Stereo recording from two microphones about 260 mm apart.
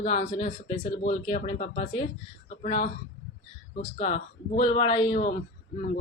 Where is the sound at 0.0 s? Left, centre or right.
Left.